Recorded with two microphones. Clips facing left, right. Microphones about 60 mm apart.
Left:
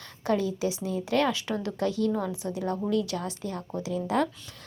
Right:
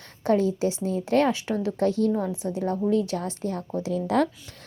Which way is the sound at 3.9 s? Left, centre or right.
Right.